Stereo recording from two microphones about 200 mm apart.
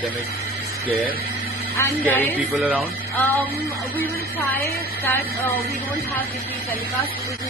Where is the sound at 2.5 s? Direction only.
Centre (ahead or behind).